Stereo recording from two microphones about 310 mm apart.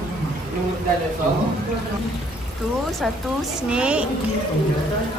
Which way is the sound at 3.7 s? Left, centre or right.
Centre.